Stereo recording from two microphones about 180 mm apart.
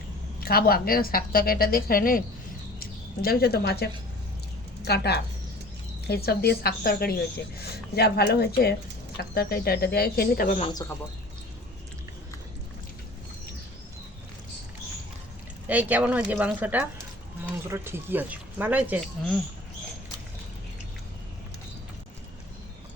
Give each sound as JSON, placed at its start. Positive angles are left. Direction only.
{"t": 0.3, "sound": "a woman's voice", "side_deg": 55}
{"t": 10.6, "sound": "speech", "side_deg": 25}
{"t": 15.6, "sound": "speech", "side_deg": -10}